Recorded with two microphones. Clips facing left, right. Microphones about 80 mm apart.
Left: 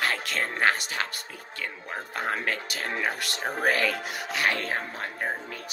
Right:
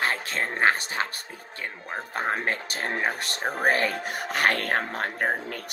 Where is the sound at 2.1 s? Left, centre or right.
Right.